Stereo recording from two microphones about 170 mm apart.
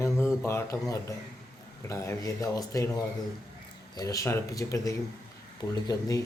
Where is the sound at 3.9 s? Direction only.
20° left (ahead or behind).